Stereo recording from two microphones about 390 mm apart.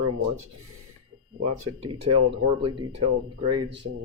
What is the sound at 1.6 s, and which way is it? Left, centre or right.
Speech, right.